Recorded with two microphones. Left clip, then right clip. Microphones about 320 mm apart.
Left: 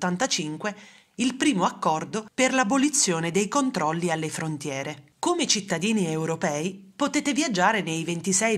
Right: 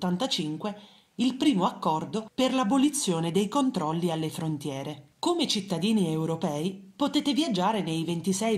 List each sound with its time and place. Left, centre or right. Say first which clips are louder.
0.0 s a woman's voice: left 3 dB; left
2.3 s speech: left 4 dB; centre
3.1 s a woman's voice: left 3 dB; left
3.3 s speech: left 2 dB; centre
3.7 s a woman's voice: left 4 dB; left